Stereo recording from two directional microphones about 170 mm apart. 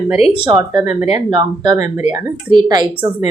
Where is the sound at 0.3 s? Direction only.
25° right (ahead or behind).